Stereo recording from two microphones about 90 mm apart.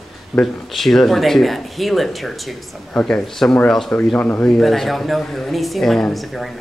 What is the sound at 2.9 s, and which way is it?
Speech, 15° left (ahead or behind).